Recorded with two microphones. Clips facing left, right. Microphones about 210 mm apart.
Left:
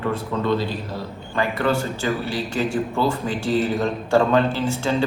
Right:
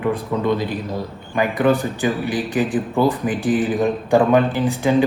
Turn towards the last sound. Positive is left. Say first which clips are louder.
# right 3 dB
turn(degrees=-15)  # may be behind; listen again after turning